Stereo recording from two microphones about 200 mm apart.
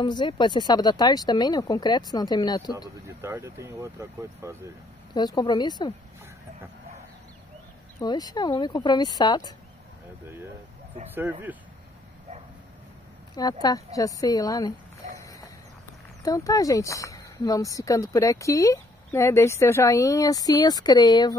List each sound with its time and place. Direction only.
0.0 s speech: 25° left (ahead or behind)
3.2 s speech: 10° right (ahead or behind)
5.1 s speech: 20° left (ahead or behind)
8.0 s speech: 20° left (ahead or behind)
13.3 s speech: 20° left (ahead or behind)
16.2 s speech: 20° left (ahead or behind)